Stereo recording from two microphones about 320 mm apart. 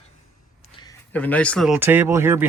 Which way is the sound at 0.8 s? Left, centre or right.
Centre.